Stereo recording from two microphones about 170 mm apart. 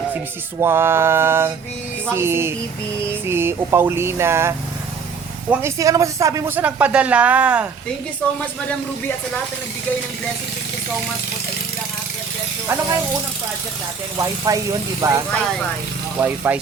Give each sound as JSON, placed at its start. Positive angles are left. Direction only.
{"t": 0.6, "sound": "speech", "side_deg": -15}
{"t": 12.6, "sound": "speech", "side_deg": -15}
{"t": 14.2, "sound": "speech", "side_deg": -20}